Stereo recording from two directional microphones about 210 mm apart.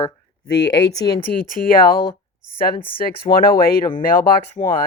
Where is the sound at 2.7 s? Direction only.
25° left (ahead or behind).